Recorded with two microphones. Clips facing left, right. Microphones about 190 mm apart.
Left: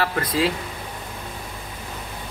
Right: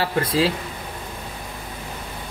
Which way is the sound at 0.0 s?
25° right (ahead or behind).